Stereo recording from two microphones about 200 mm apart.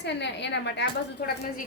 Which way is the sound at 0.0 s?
60° left (ahead or behind).